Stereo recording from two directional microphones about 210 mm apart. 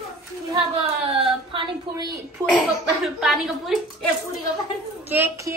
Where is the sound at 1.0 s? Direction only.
25° right (ahead or behind).